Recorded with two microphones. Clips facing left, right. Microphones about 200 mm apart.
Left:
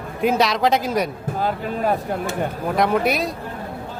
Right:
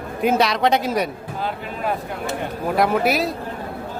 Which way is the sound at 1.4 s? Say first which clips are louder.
Left 5 dB; 45° left (ahead or behind).